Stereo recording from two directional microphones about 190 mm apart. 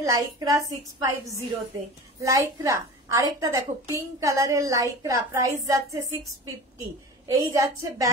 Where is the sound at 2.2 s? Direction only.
15° right (ahead or behind).